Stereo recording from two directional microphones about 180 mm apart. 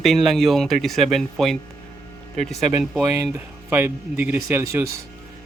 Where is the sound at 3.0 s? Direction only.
15° right (ahead or behind).